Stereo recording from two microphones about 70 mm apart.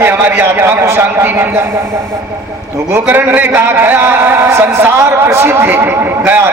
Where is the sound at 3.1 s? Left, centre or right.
Right.